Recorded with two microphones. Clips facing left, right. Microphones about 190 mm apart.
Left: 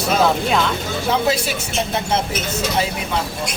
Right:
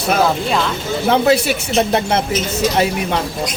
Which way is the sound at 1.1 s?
65° right (ahead or behind).